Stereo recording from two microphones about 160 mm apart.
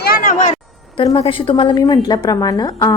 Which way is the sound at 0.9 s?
35° left (ahead or behind).